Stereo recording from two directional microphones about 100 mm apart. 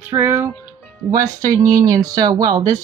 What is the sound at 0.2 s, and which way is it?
Music, 25° right (ahead or behind).